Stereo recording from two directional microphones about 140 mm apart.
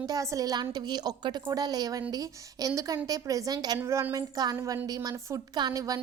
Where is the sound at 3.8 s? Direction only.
15° right (ahead or behind).